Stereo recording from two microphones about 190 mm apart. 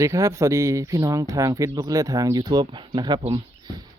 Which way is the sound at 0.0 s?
15° right (ahead or behind).